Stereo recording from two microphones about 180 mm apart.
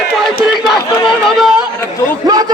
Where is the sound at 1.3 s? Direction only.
Centre (ahead or behind).